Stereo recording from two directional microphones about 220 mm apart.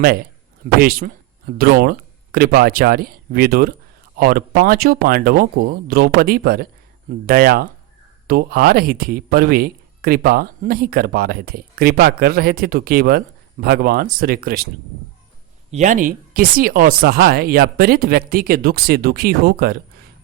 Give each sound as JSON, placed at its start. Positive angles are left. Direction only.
{"t": 0.8, "sound": "speech", "side_deg": -40}
{"t": 15.7, "sound": "speech", "side_deg": -35}